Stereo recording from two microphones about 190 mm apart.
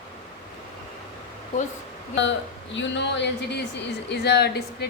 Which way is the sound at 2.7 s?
70° left (ahead or behind).